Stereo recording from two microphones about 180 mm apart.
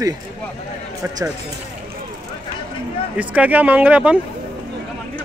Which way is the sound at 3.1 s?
10° right (ahead or behind).